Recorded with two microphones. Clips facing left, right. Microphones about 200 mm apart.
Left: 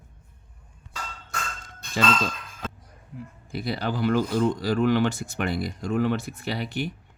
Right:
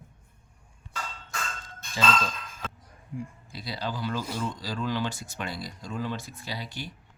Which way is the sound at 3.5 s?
55° left (ahead or behind).